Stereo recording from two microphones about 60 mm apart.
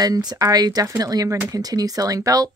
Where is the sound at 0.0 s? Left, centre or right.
Right.